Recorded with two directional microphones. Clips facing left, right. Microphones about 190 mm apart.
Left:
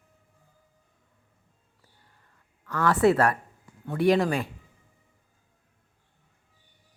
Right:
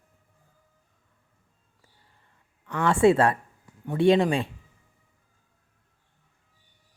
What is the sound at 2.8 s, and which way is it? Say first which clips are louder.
Speech: right 2 dB; 25° right (ahead or behind).